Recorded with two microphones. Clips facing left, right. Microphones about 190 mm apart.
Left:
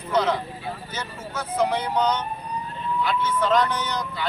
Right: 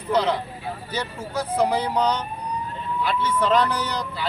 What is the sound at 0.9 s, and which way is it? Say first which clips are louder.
Speech: right 4 dB; 35° right (ahead or behind).